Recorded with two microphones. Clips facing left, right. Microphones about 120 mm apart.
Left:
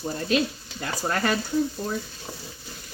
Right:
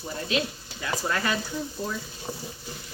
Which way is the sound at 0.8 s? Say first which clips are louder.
Left 2 dB; 45° left (ahead or behind).